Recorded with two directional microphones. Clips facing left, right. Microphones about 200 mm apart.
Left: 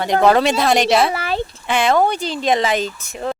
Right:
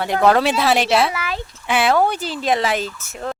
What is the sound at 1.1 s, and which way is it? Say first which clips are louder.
Speech: left 4 dB; 30° left (ahead or behind).